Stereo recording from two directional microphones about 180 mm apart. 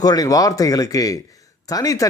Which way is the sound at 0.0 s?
20° left (ahead or behind).